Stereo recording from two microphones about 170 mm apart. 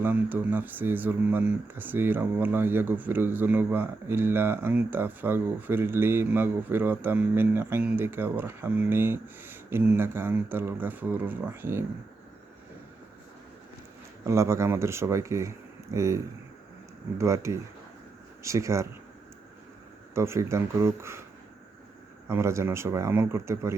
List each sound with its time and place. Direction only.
0.0 s speech: 10° right (ahead or behind)
14.3 s speech: 15° right (ahead or behind)
20.1 s speech: 15° right (ahead or behind)
22.3 s speech: 15° right (ahead or behind)